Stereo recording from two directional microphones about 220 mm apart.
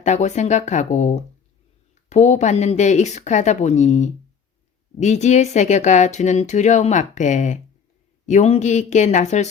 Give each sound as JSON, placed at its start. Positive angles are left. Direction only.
{"t": 0.0, "sound": "speech", "side_deg": 30}